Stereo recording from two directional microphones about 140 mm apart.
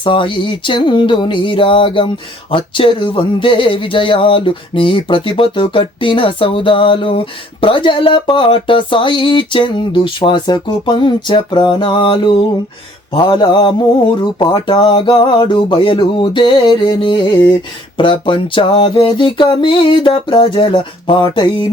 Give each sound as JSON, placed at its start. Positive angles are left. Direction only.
{"t": 0.0, "sound": "speech", "side_deg": 35}